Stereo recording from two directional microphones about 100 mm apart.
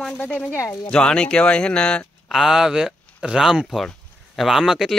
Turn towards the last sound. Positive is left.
turn(degrees=0)  # may be behind; listen again after turning